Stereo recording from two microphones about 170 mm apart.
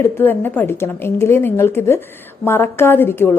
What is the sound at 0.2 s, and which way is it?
A woman's voice, 10° left (ahead or behind).